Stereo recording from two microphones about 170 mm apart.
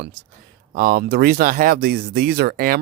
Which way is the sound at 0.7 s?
60° right (ahead or behind).